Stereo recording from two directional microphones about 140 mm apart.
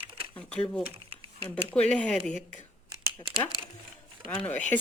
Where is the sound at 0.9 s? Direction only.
40° right (ahead or behind).